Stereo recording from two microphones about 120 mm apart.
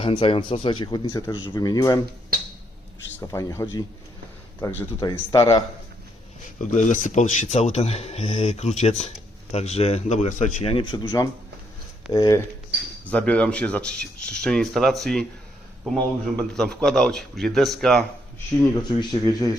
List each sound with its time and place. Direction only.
0.0 s speech: 45° left (ahead or behind)
3.3 s speech: 25° left (ahead or behind)
6.6 s a man's voice: 90° left
7.5 s speech: 65° left (ahead or behind); by 10.6 s 90° left
10.6 s speech: 50° left (ahead or behind)
10.9 s speech: 35° left (ahead or behind)
13.1 s speech: 10° left (ahead or behind)
16.4 s speech: 5° left (ahead or behind)
18.7 s speech: 40° left (ahead or behind)